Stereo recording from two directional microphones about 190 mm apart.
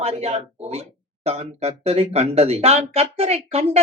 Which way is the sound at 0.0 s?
30° right (ahead or behind).